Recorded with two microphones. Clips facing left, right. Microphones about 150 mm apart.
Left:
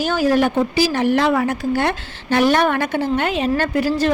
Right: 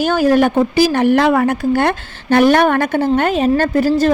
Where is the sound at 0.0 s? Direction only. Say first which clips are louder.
Right 4 dB; 55° right (ahead or behind).